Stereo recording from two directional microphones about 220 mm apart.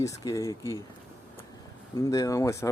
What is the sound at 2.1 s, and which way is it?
Speech, 15° left (ahead or behind).